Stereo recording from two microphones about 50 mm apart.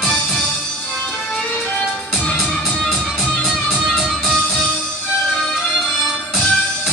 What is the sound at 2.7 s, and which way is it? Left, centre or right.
Music, centre.